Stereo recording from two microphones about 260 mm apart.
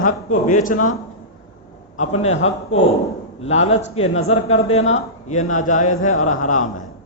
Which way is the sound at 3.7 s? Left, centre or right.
Left.